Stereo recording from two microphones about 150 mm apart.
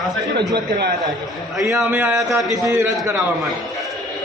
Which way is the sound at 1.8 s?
15° right (ahead or behind).